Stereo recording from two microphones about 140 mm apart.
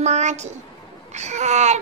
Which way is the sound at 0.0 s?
55° right (ahead or behind).